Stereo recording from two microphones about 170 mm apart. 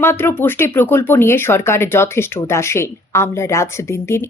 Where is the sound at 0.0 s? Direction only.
15° left (ahead or behind).